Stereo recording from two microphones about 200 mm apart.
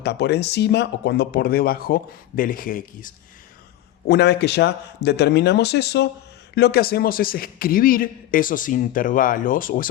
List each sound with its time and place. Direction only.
0.0 s a man's voice: 55° left (ahead or behind)
4.1 s a man's voice: 55° left (ahead or behind)